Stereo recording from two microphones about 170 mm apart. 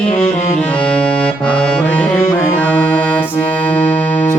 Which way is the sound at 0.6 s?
5° left (ahead or behind).